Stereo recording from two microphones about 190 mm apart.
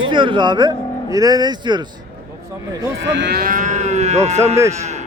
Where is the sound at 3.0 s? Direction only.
65° right (ahead or behind); by 4.6 s 35° right (ahead or behind).